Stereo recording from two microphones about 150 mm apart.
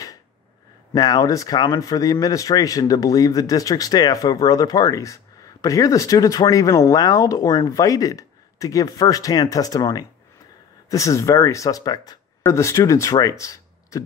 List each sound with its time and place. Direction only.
0.9 s speech: 25° left (ahead or behind)